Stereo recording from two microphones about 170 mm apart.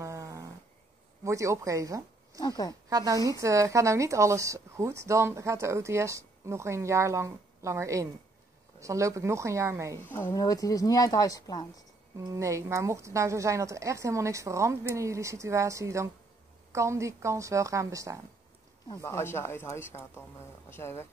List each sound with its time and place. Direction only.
0.0 s snoring: 20° right (ahead or behind)
1.2 s speech: 20° right (ahead or behind)
2.4 s speech: 25° left (ahead or behind)
2.9 s speech: 20° right (ahead or behind)
10.0 s speech: 15° left (ahead or behind)
12.2 s speech: 20° right (ahead or behind)
18.9 s speech: 15° left (ahead or behind)